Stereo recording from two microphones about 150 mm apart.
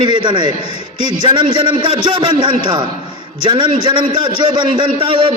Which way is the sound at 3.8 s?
30° right (ahead or behind).